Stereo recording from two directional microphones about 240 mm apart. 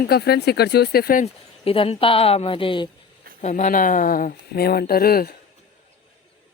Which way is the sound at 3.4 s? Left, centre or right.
Left.